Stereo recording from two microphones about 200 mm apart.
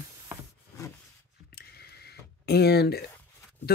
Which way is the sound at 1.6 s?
50° left (ahead or behind).